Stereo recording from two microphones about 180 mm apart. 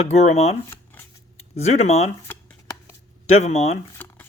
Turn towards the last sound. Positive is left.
turn(degrees=10)  # may be behind; listen again after turning